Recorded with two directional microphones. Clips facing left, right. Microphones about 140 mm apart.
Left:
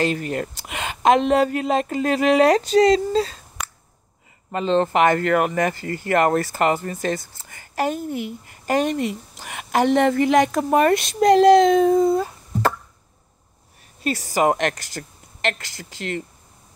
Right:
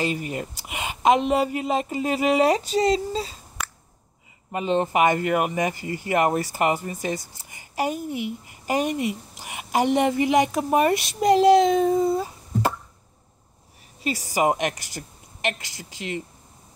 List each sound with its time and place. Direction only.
0.0 s speech: 10° right (ahead or behind)
4.6 s speech: 10° right (ahead or behind)
14.0 s speech: 10° right (ahead or behind)